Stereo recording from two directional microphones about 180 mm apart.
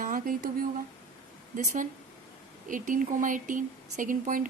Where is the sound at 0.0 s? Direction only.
50° right (ahead or behind).